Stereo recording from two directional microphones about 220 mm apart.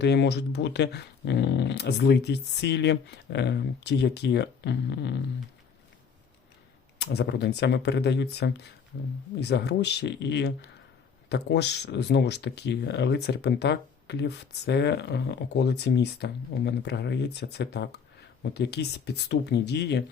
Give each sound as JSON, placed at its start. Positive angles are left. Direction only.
{"t": 0.0, "sound": "speech", "side_deg": 50}
{"t": 7.0, "sound": "speech", "side_deg": 50}